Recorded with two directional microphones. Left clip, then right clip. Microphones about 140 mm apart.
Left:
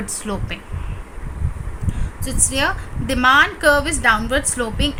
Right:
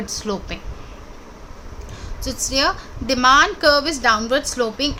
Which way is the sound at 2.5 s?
25° right (ahead or behind).